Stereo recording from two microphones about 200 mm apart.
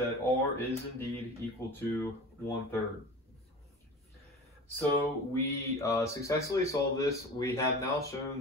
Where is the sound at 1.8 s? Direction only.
10° left (ahead or behind).